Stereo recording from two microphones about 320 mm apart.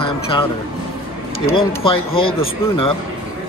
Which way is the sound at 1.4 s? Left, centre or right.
Centre.